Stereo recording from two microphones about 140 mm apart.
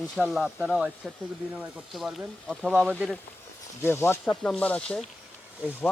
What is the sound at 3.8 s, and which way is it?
Speech, 15° left (ahead or behind).